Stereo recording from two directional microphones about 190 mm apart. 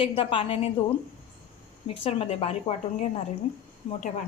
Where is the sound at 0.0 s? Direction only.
25° left (ahead or behind).